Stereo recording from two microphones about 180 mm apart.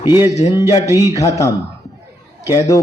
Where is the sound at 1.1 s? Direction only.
20° left (ahead or behind).